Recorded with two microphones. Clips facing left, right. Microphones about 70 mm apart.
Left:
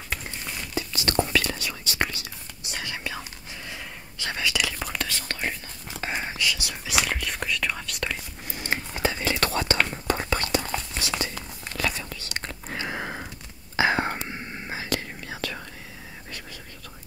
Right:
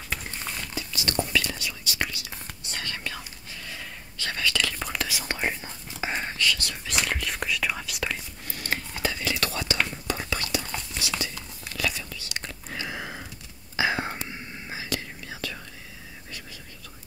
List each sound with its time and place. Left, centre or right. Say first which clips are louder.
0.7 s whispering: left 5 dB; left
1.9 s whispering: left 3 dB; left
2.6 s whispering: left 2 dB; centre
5.2 s whispering: right 2 dB; centre
6.1 s whispering: right 1 dB; centre
8.5 s whispering: left 2 dB; centre; by 15.6 s left